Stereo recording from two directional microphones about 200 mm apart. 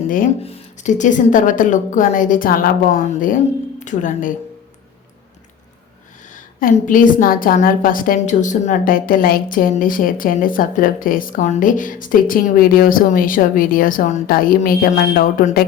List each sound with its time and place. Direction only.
0.4 s a woman's voice: 35° left (ahead or behind)
6.3 s a woman's voice: 40° left (ahead or behind)